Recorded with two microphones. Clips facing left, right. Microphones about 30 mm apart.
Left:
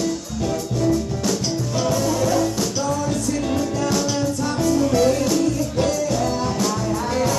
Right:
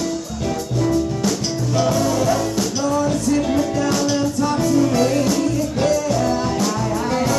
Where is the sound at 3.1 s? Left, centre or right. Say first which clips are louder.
Right 4 dB; right.